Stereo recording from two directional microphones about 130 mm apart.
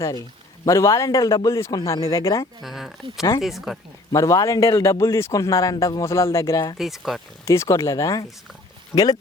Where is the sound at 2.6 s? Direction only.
Centre (ahead or behind).